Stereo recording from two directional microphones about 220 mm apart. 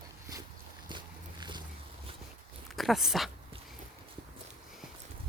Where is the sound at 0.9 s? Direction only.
20° right (ahead or behind).